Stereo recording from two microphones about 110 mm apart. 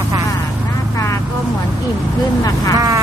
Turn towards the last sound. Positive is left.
turn(degrees=-35)  # may be behind; listen again after turning